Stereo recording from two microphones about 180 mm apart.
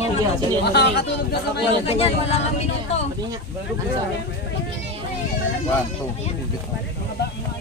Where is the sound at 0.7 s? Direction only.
65° left (ahead or behind).